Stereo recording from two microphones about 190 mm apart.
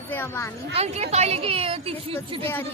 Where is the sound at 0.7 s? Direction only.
35° right (ahead or behind).